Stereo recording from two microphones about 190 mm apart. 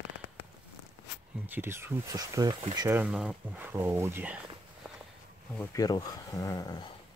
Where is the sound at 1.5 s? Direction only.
10° right (ahead or behind).